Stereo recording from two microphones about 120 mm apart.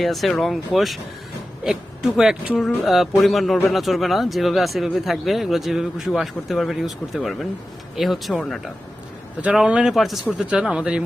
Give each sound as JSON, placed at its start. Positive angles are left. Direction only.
{"t": 0.0, "sound": "speech", "side_deg": 0}